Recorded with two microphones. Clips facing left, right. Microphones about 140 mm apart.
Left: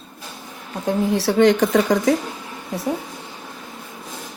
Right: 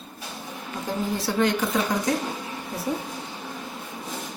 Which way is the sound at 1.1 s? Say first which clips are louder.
Left 8 dB; 90° left.